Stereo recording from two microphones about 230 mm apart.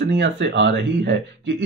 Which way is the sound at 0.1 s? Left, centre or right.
Right.